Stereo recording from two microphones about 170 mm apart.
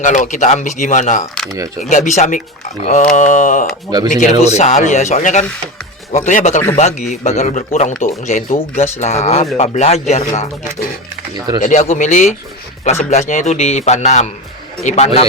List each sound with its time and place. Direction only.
0.0 s a man's voice: 45° left (ahead or behind)
11.3 s speech: 25° right (ahead or behind)
11.6 s a man's voice: 40° left (ahead or behind)